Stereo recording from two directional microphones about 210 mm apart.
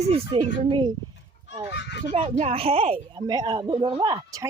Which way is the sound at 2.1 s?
30° right (ahead or behind).